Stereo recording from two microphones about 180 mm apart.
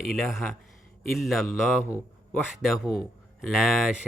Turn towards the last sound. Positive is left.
turn(degrees=-5)  # may be behind; listen again after turning